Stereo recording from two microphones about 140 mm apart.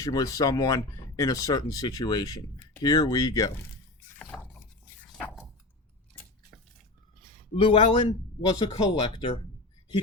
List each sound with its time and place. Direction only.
0.0 s speech: 25° left (ahead or behind)
4.3 s a sound: 10° left (ahead or behind)
7.5 s speech: 40° left (ahead or behind)